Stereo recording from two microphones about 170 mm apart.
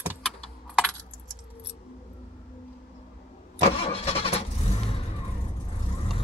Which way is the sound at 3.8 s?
35° left (ahead or behind).